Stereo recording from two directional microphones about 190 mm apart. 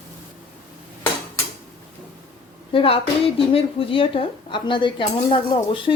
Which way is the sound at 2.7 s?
30° left (ahead or behind).